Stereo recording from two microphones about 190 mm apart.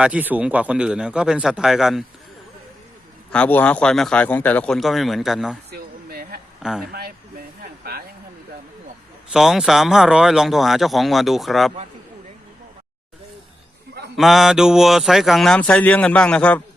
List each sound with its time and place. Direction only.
0.0 s speech: 10° right (ahead or behind)
3.3 s speech: 10° left (ahead or behind)
5.7 s a sound: 55° right (ahead or behind)
6.6 s speech: 5° right (ahead or behind)
7.6 s a sound: 50° right (ahead or behind)
9.3 s speech: centre (ahead or behind)
14.2 s speech: centre (ahead or behind)